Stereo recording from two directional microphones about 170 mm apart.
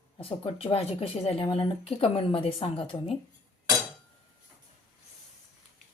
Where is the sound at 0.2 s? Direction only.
35° left (ahead or behind).